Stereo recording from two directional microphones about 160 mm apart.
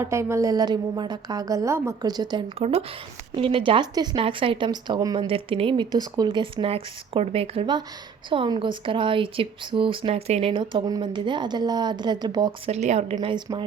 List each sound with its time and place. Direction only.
0.0 s a woman's voice: 15° right (ahead or behind)
2.6 s speech: 40° right (ahead or behind)
12.6 s speech: 45° right (ahead or behind)
13.1 s a woman's voice: 25° right (ahead or behind)